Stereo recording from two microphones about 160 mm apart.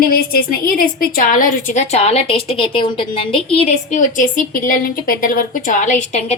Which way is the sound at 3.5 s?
45° left (ahead or behind).